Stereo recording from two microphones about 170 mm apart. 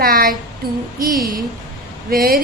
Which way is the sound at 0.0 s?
60° right (ahead or behind).